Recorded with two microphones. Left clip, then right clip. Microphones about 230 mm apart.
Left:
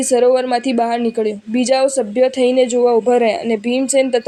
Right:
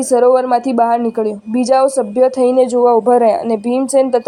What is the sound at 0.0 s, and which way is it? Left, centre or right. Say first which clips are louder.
Speech: right 2 dB; centre.